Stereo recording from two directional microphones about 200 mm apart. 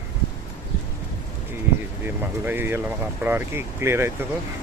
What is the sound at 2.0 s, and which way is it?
Speech, 10° right (ahead or behind).